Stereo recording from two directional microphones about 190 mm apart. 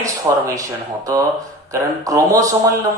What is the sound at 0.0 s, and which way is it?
Speech, 15° right (ahead or behind).